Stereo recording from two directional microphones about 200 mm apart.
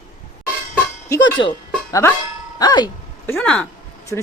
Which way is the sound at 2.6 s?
20° left (ahead or behind).